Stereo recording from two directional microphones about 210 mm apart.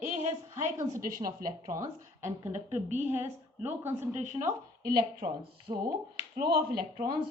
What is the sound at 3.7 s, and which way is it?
Speech, 10° right (ahead or behind).